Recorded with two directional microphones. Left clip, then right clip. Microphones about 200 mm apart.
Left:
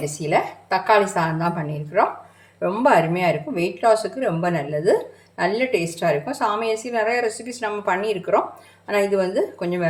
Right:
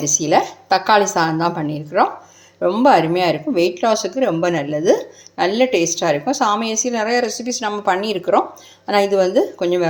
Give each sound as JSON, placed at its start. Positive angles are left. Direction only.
{"t": 0.2, "sound": "a woman's voice", "side_deg": -35}